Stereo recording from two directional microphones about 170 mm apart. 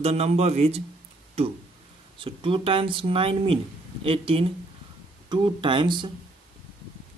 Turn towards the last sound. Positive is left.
turn(degrees=-30)  # may be behind; listen again after turning